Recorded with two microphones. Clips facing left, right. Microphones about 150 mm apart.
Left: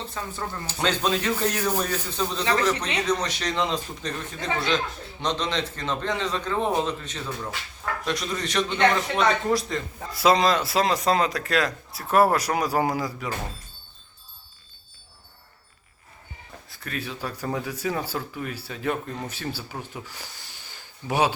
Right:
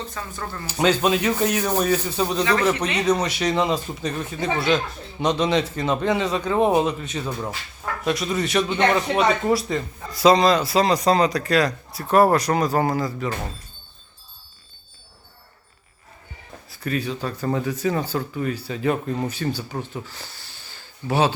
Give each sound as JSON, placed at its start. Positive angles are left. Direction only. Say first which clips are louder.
{"t": 0.1, "sound": "speech", "louder": "even", "side_deg": 25}
{"t": 0.7, "sound": "a man's voice", "louder": "right 6 dB", "side_deg": -10}
{"t": 16.6, "sound": "speech", "louder": "right 8 dB", "side_deg": 0}